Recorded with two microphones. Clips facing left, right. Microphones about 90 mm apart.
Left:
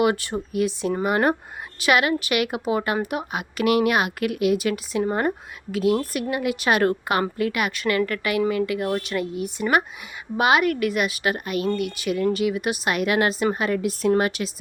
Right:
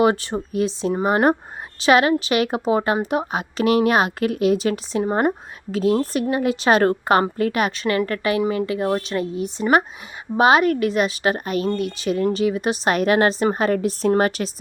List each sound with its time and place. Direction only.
0.0 s a woman's voice: 25° right (ahead or behind)